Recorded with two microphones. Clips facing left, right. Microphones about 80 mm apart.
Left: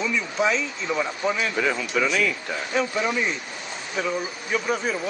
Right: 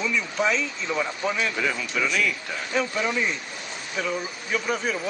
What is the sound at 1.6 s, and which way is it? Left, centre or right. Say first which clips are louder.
Speech: left 3 dB; left.